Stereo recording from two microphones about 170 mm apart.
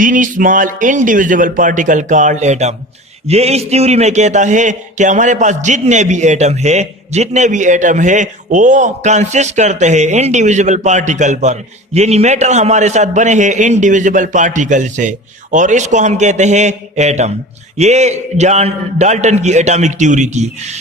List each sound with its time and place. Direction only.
0.0 s a man's voice: 50° right (ahead or behind)